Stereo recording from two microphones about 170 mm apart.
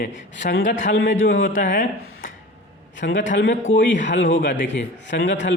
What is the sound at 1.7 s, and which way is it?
Speech, 60° left (ahead or behind).